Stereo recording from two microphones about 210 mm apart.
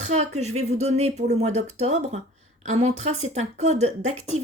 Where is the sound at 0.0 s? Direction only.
35° right (ahead or behind).